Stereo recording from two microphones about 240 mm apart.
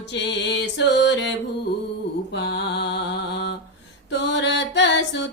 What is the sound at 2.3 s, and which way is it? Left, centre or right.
Mantra, left.